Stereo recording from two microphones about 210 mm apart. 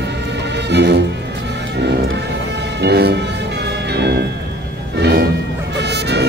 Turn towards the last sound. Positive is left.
turn(degrees=-55)  # may be behind; listen again after turning